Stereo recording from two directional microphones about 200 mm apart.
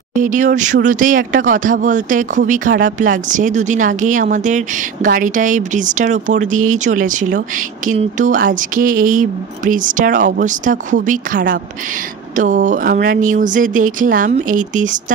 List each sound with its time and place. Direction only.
0.1 s speech: 40° right (ahead or behind)